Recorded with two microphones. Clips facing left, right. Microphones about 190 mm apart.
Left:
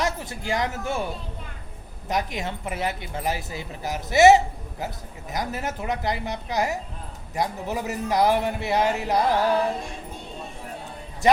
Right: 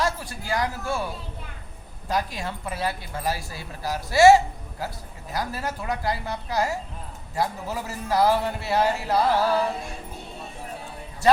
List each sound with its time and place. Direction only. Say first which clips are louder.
0.0 s a woman's voice: even; 20° left (ahead or behind)
2.0 s a woman's voice: even; 20° left (ahead or behind)